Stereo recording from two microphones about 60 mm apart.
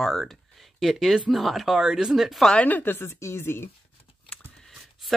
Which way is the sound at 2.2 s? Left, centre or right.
Centre.